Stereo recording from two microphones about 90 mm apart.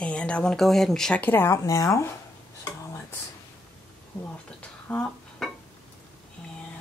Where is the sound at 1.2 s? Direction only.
20° left (ahead or behind).